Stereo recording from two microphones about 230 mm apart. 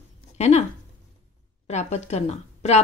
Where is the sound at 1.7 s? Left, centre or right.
Left.